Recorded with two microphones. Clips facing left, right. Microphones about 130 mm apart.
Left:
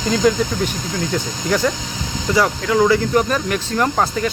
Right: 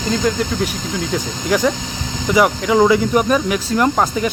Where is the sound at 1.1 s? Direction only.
10° right (ahead or behind).